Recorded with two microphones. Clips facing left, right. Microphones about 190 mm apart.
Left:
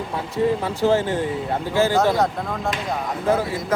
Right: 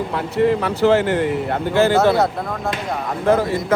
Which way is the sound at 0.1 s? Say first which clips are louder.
Right 3 dB; 80° right.